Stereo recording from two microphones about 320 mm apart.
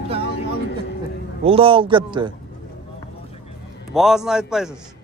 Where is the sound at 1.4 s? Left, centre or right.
Centre.